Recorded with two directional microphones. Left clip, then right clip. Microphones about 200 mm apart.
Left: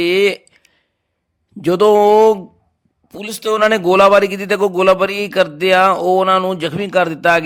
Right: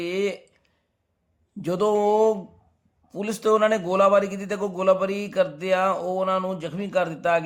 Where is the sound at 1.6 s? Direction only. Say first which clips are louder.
Left 11 dB; 35° left (ahead or behind).